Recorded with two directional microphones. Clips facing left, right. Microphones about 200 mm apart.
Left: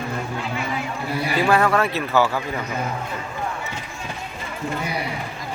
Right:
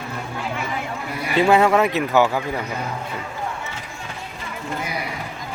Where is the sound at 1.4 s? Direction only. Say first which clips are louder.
Right 4 dB; 20° right (ahead or behind).